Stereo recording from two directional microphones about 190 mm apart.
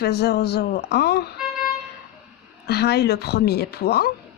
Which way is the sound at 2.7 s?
60° left (ahead or behind).